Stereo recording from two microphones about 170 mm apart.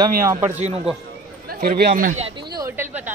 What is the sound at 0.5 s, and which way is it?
Speech, 40° right (ahead or behind).